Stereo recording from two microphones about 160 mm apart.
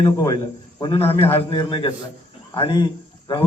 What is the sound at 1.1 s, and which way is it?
Speech, 15° left (ahead or behind).